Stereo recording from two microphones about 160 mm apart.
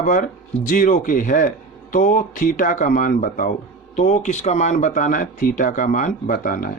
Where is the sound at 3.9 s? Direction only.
45° left (ahead or behind).